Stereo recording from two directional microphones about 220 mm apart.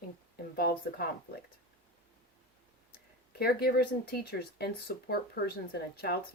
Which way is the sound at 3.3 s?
45° left (ahead or behind).